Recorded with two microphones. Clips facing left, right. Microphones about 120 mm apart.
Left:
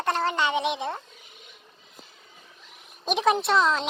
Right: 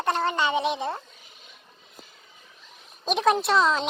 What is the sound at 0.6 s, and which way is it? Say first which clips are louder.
Speech: right 1 dB; 20° left (ahead or behind).